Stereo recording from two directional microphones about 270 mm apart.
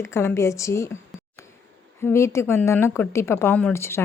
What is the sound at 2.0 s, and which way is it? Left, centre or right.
Speech, centre.